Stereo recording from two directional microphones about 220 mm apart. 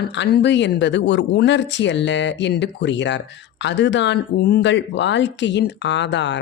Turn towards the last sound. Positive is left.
turn(degrees=55)  # may be behind; listen again after turning